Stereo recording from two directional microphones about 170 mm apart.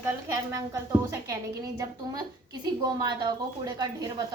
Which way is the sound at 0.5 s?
20° right (ahead or behind).